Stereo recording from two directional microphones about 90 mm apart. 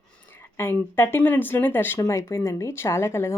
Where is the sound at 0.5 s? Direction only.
25° left (ahead or behind).